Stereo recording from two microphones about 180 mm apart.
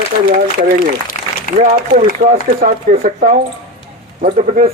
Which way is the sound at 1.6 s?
45° right (ahead or behind).